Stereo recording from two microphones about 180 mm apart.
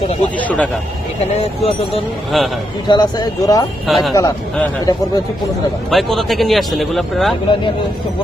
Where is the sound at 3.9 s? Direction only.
Centre (ahead or behind).